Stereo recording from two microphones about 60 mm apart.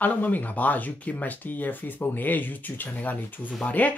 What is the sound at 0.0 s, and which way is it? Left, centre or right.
Speech, left.